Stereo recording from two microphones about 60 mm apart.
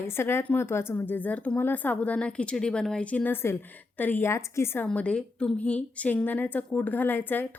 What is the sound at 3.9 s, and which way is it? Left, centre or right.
Speech, left.